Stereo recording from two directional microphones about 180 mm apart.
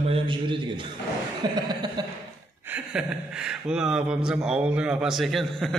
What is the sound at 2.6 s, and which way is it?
Speech, 10° right (ahead or behind).